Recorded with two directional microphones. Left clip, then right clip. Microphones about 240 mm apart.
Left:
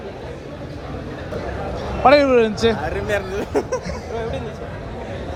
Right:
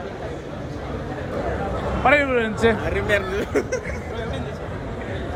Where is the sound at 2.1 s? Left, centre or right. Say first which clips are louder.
Left 5 dB; centre.